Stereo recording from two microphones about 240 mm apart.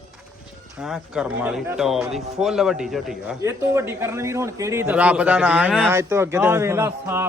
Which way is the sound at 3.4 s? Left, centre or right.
Centre.